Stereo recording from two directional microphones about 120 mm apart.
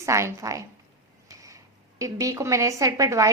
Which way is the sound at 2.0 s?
25° right (ahead or behind).